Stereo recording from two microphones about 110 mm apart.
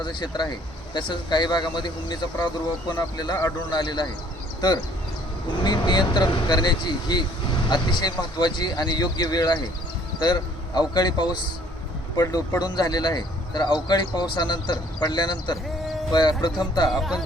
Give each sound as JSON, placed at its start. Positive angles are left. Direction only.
{"t": 0.0, "sound": "a man's voice", "side_deg": 45}
{"t": 5.6, "sound": "a man's voice", "side_deg": 40}
{"t": 17.0, "sound": "speech", "side_deg": 0}